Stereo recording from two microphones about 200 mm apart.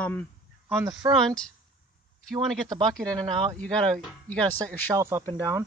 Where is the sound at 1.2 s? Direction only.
5° left (ahead or behind).